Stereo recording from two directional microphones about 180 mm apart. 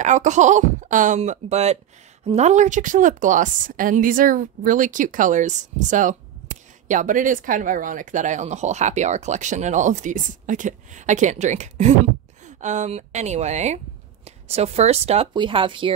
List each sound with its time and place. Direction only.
0.0 s a woman's voice: 40° right (ahead or behind)